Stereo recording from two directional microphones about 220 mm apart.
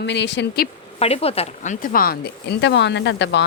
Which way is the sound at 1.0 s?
25° left (ahead or behind).